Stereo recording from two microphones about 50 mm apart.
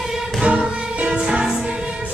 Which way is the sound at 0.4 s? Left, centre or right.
Centre.